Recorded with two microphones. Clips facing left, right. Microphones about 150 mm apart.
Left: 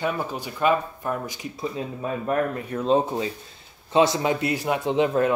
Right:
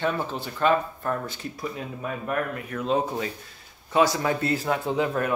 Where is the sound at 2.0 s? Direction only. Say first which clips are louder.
Left 4 dB; 30° left (ahead or behind).